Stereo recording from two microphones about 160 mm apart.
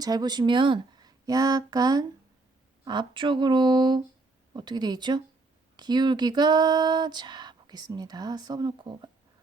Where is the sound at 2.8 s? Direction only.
30° right (ahead or behind).